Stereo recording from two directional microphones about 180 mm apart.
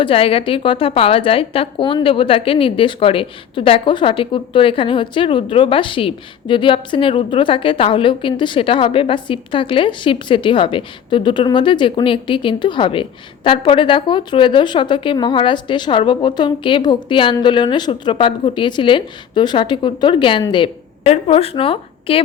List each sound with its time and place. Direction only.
0.0 s a woman's voice: 30° left (ahead or behind)